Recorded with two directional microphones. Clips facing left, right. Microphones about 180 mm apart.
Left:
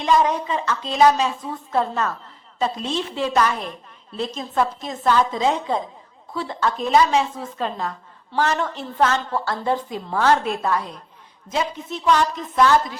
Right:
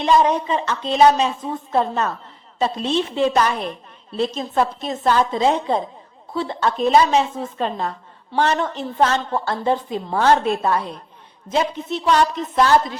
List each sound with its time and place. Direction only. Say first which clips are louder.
0.0 s a woman's voice: right 2 dB; 20° right (ahead or behind)
4.1 s a woman's voice: right 5 dB; 70° right (ahead or behind)
4.4 s a woman's voice: right 2 dB; 30° right (ahead or behind)
11.5 s a woman's voice: right 4 dB; 70° right (ahead or behind)
12.1 s a woman's voice: right 3 dB; 30° right (ahead or behind)